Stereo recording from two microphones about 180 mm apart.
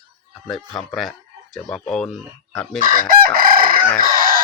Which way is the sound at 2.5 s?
5° left (ahead or behind).